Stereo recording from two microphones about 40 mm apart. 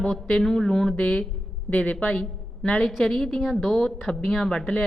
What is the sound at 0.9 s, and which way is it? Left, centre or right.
A woman's voice, left.